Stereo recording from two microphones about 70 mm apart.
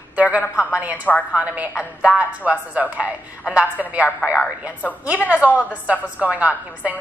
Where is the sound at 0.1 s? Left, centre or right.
Right.